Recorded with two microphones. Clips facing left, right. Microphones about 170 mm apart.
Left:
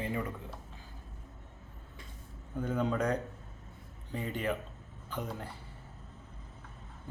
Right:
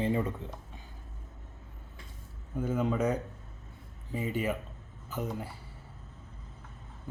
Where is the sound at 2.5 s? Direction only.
5° right (ahead or behind).